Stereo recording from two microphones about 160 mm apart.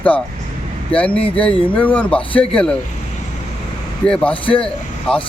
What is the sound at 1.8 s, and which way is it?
Speech, 10° left (ahead or behind).